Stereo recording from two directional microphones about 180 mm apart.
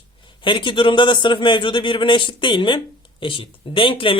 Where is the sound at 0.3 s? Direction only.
25° left (ahead or behind).